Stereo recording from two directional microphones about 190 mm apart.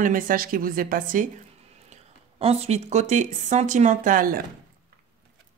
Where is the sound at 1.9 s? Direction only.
30° right (ahead or behind).